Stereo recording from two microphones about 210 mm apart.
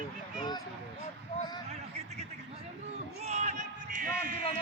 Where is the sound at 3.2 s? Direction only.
35° right (ahead or behind).